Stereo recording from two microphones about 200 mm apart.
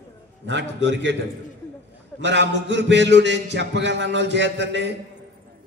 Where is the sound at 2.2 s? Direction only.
60° right (ahead or behind).